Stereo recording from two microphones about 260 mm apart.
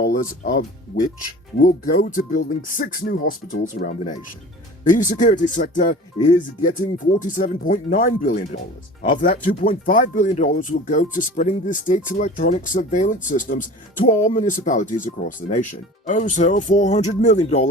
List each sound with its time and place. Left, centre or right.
0.0 s speech: left